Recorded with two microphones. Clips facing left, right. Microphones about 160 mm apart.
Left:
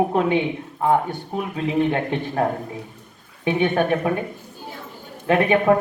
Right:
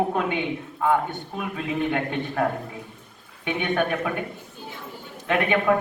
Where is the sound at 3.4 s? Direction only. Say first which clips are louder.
Left 5 dB; 35° left (ahead or behind).